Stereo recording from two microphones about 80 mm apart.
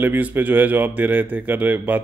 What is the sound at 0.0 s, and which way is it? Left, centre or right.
A man's voice, right.